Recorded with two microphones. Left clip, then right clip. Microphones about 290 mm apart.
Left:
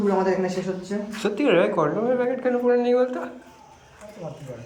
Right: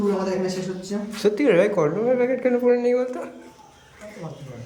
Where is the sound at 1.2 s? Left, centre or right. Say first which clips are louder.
Right 2 dB; centre.